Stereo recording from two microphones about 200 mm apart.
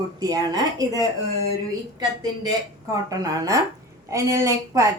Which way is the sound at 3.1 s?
15° right (ahead or behind).